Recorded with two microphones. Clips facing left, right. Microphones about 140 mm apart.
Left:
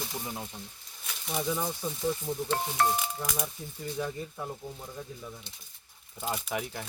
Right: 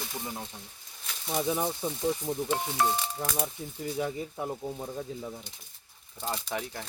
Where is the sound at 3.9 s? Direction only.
20° right (ahead or behind).